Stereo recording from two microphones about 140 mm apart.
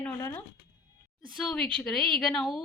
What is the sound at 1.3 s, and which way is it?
A woman's voice, centre (ahead or behind).